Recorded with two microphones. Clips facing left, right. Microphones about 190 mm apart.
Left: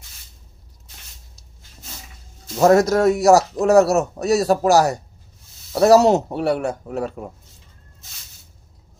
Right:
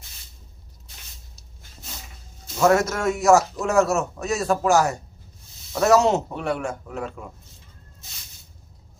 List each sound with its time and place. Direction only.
2.6 s a man's voice: 35° left (ahead or behind)